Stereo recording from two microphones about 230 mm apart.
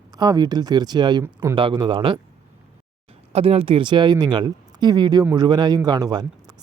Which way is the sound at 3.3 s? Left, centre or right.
Right.